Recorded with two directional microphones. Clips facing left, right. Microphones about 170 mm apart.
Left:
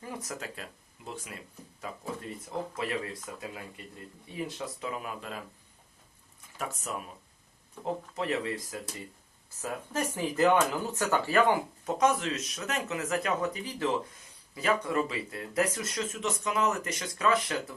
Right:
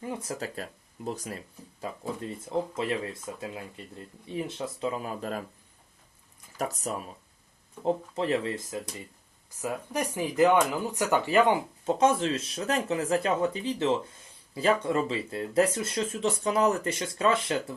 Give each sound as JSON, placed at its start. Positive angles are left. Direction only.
{"t": 0.0, "sound": "speech", "side_deg": -25}
{"t": 2.4, "sound": "speech", "side_deg": -25}
{"t": 6.6, "sound": "speech", "side_deg": -35}
{"t": 8.1, "sound": "speech", "side_deg": -30}
{"t": 9.6, "sound": "speech", "side_deg": -15}